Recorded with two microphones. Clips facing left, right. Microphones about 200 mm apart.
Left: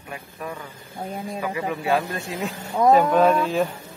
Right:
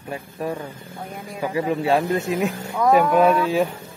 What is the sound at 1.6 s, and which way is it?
Speech, 30° right (ahead or behind).